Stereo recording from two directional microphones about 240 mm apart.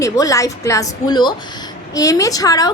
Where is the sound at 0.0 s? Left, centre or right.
Centre.